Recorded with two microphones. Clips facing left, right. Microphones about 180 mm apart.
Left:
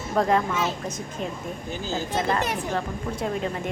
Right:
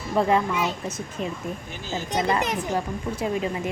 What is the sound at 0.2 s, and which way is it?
A child's voice, 5° right (ahead or behind).